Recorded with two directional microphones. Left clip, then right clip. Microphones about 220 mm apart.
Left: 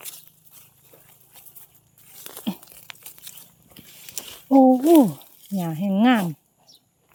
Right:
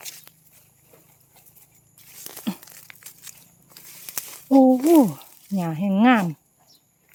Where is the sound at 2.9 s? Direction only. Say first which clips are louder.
Left 5 dB; 20° left (ahead or behind).